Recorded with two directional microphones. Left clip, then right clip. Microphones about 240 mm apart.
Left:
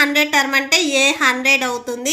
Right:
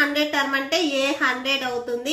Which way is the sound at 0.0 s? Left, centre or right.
Left.